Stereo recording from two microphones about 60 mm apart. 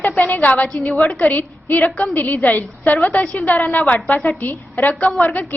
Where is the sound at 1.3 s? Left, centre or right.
Left.